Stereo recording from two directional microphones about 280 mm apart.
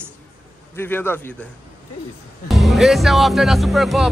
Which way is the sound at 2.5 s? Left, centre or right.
Centre.